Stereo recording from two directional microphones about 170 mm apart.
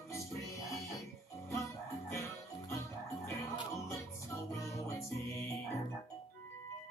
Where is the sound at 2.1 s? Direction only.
20° left (ahead or behind).